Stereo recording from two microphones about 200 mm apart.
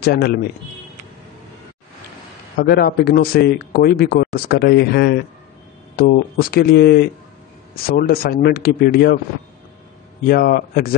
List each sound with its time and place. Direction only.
0.0 s a man's voice: 55° left (ahead or behind)
2.5 s a man's voice: 50° left (ahead or behind)
10.2 s a man's voice: 50° left (ahead or behind)